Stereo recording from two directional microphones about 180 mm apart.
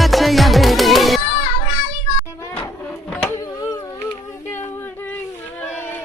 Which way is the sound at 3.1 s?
15° left (ahead or behind).